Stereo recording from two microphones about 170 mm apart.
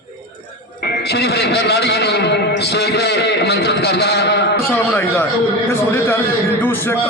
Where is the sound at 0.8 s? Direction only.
75° left (ahead or behind).